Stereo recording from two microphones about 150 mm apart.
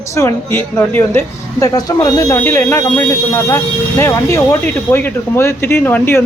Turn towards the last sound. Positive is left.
turn(degrees=15)  # may be behind; listen again after turning